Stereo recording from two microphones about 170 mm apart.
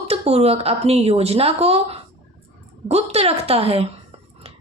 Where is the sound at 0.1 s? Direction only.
35° right (ahead or behind).